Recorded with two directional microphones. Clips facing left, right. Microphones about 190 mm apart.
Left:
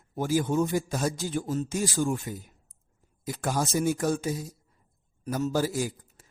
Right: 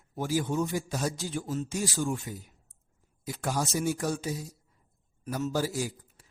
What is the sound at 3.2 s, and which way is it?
Speech, 50° left (ahead or behind).